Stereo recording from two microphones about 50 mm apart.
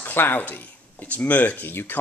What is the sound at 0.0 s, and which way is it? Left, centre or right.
Speech, left.